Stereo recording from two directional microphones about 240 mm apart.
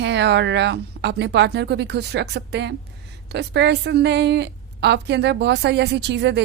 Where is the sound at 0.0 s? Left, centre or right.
Right.